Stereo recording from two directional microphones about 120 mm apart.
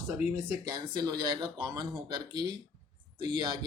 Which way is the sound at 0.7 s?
35° right (ahead or behind).